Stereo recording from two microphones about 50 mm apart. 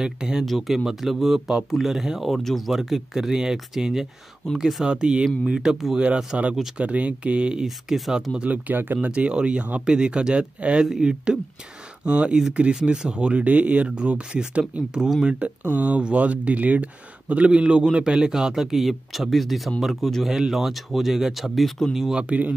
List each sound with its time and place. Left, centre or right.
0.0 s speech: centre
0.5 s a man's voice: centre
4.8 s speech: centre
5.9 s speech: right
7.6 s a man's voice: centre
8.5 s speech: right
9.1 s speech: right
14.6 s speech: centre
15.2 s a man's voice: right; by 20.2 s centre
20.2 s a man's voice: centre
22.2 s speech: right